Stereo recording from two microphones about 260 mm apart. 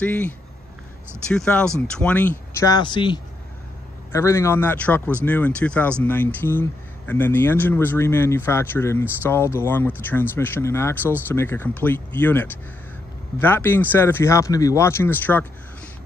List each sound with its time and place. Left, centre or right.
0.0 s speech: centre
1.3 s speech: centre